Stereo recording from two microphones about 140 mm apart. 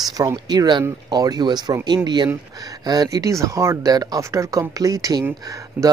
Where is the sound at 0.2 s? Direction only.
25° right (ahead or behind).